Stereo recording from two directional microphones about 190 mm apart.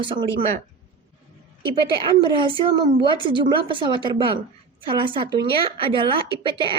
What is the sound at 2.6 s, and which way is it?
Speech, 25° right (ahead or behind).